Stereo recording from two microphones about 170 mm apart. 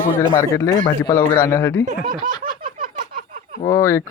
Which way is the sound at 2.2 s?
55° right (ahead or behind).